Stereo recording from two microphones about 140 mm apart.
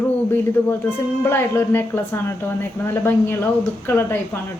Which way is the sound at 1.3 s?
15° left (ahead or behind).